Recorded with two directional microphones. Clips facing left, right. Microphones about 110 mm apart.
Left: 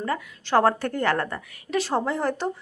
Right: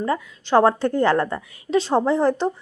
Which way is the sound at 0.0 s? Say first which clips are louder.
Right 4 dB; 20° right (ahead or behind).